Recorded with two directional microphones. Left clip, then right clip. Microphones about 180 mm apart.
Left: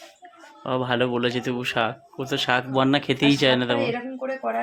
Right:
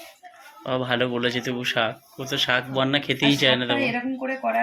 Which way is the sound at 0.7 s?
25° left (ahead or behind).